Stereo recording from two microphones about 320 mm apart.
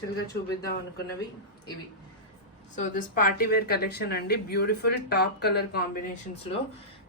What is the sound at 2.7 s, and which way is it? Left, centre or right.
Speech, left.